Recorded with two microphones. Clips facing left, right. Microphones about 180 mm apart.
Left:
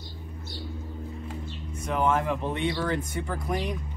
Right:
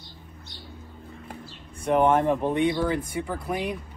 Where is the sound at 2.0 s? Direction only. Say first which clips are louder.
Right 5 dB; 25° right (ahead or behind).